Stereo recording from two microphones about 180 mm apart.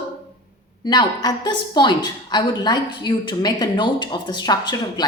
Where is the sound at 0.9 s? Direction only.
25° left (ahead or behind).